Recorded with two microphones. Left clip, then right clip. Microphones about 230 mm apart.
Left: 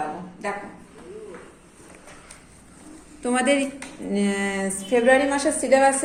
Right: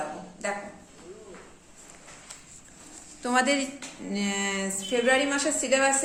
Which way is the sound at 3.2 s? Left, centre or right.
Right.